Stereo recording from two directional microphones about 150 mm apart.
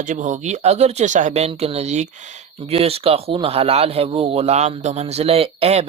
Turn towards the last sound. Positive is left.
turn(degrees=-45)  # may be behind; listen again after turning